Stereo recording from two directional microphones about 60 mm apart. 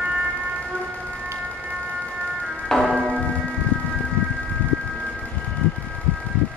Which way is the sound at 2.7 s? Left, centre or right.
Centre.